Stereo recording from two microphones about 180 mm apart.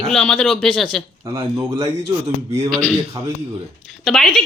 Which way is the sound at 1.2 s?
15° right (ahead or behind).